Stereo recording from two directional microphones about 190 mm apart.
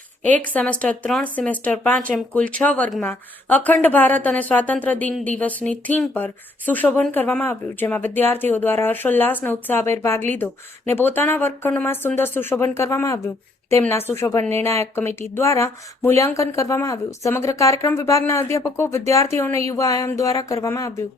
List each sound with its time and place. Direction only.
0.4 s speech: 10° left (ahead or behind)